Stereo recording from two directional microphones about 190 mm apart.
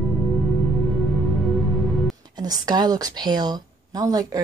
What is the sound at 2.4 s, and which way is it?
A woman's voice, 20° right (ahead or behind).